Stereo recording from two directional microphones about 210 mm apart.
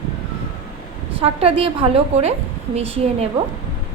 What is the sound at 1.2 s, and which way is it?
A woman's voice, 25° right (ahead or behind).